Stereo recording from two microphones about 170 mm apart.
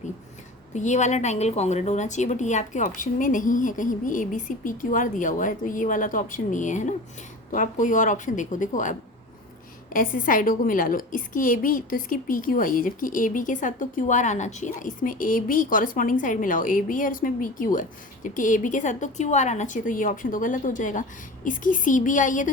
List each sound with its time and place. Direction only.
0.7 s a woman's voice: 45° left (ahead or behind)